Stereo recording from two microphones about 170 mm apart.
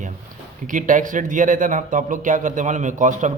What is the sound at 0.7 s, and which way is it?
A man's voice, 50° right (ahead or behind).